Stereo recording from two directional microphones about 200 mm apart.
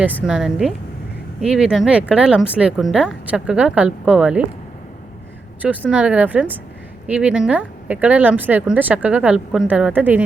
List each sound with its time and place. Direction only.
0.3 s speech: 5° right (ahead or behind)
5.6 s speech: 5° right (ahead or behind)